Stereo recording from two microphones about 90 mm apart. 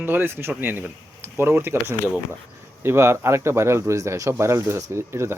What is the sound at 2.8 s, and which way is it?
Speech, 30° right (ahead or behind).